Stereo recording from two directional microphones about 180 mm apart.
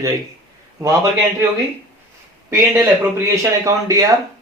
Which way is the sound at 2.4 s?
15° right (ahead or behind).